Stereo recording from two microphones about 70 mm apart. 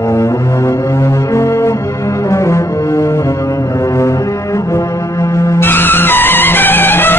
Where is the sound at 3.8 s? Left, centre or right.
Left.